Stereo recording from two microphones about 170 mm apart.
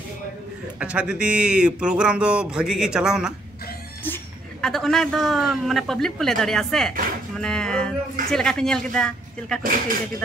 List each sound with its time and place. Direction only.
0.7 s speech: 5° right (ahead or behind)
4.0 s speech: 10° left (ahead or behind)
9.6 s speech: 55° right (ahead or behind)